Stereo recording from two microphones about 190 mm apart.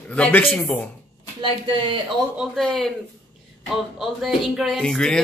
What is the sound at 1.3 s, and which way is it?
Speech, 25° right (ahead or behind).